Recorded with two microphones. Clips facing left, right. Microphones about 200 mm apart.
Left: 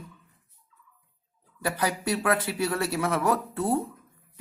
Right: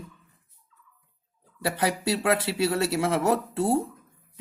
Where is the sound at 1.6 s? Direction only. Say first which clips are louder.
Right 2 dB; 25° right (ahead or behind).